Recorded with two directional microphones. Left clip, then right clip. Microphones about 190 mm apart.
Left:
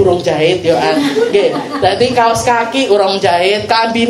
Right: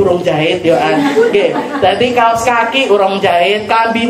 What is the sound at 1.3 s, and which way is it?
A woman's voice, 45° left (ahead or behind).